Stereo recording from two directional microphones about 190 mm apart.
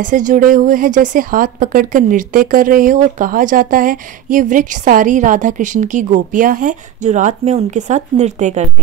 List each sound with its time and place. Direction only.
0.0 s a woman's voice: 45° right (ahead or behind)